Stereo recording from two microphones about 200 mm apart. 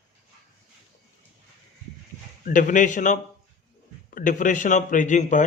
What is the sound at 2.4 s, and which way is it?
Speech, 40° left (ahead or behind).